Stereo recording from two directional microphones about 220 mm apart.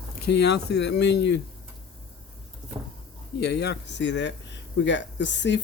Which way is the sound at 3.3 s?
50° left (ahead or behind).